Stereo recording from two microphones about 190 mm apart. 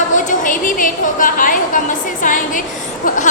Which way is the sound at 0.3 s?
45° left (ahead or behind).